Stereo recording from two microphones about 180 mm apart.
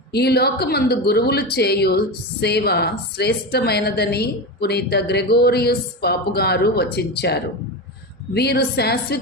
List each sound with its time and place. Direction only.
0.1 s a woman's voice: 65° left (ahead or behind)